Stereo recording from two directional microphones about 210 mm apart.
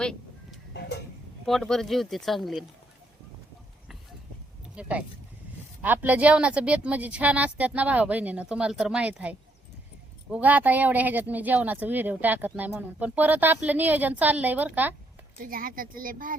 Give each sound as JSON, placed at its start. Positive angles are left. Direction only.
{"t": 0.0, "sound": "chicken", "side_deg": 5}
{"t": 0.7, "sound": "a sound", "side_deg": 55}
{"t": 1.5, "sound": "speech", "side_deg": 0}
{"t": 4.7, "sound": "speech", "side_deg": -5}
{"t": 10.3, "sound": "speech", "side_deg": -10}
{"t": 15.4, "sound": "speech", "side_deg": -40}